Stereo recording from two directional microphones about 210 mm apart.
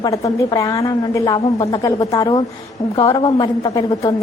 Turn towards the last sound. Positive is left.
turn(degrees=20)  # may be behind; listen again after turning